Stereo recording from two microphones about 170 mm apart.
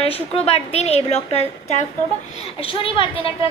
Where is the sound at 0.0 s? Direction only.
35° left (ahead or behind).